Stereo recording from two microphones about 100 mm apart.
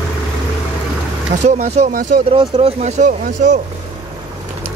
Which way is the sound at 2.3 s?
65° right (ahead or behind).